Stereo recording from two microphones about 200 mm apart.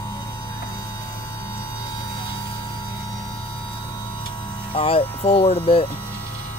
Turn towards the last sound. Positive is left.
turn(degrees=30)  # may be behind; listen again after turning